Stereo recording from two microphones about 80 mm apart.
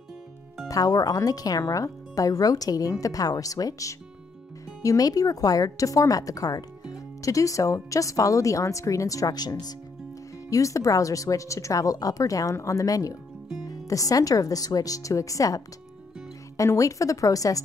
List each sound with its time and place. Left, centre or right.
0.7 s speech: left
10.5 s speech: left